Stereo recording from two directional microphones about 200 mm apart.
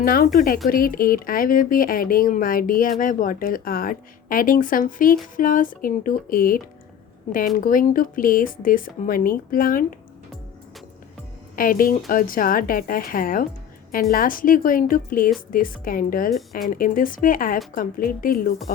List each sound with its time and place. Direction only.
0.0 s a woman's voice: 45° left (ahead or behind)
11.5 s a woman's voice: 45° left (ahead or behind)
16.3 s speech: centre (ahead or behind)
16.6 s a woman's voice: 45° left (ahead or behind)